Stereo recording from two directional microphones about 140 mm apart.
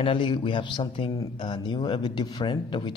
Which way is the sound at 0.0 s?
35° left (ahead or behind).